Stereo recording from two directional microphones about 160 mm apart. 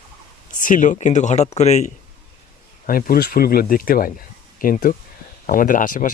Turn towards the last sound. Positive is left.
turn(degrees=55)  # may be behind; listen again after turning